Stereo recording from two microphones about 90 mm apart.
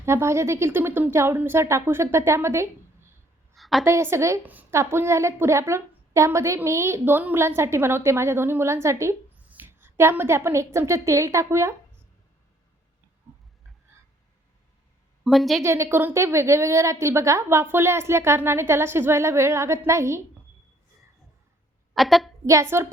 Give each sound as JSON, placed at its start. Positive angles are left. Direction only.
{"t": 0.0, "sound": "a woman's voice", "side_deg": -30}
{"t": 3.5, "sound": "a sound", "side_deg": 0}
{"t": 3.8, "sound": "a woman's voice", "side_deg": -30}
{"t": 15.2, "sound": "a woman's voice", "side_deg": 0}
{"t": 15.6, "sound": "a woman's voice", "side_deg": -30}
{"t": 21.9, "sound": "a woman's voice", "side_deg": 0}
{"t": 22.4, "sound": "a woman's voice", "side_deg": -30}